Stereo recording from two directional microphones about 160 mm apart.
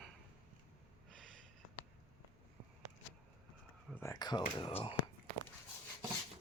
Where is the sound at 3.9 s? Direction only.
15° left (ahead or behind).